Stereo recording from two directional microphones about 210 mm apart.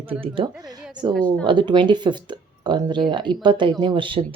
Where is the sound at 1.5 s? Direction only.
20° right (ahead or behind).